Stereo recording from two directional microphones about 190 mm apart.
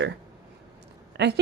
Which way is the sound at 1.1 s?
65° right (ahead or behind).